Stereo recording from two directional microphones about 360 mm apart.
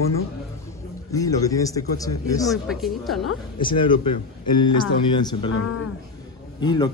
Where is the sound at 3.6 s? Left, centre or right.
Centre.